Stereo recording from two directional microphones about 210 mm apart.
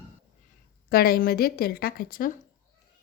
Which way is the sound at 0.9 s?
45° left (ahead or behind).